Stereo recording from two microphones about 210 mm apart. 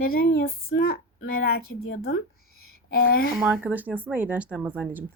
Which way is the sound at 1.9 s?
45° left (ahead or behind).